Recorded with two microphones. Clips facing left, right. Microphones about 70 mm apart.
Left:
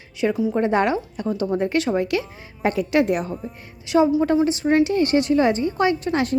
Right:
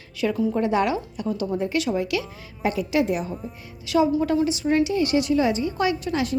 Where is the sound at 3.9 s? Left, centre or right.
Left.